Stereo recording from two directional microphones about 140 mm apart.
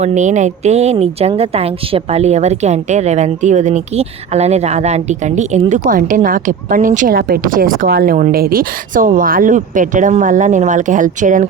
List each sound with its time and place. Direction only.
0.0 s speech: 60° right (ahead or behind)